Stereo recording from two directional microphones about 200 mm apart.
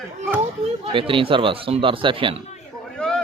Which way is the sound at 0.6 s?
30° right (ahead or behind).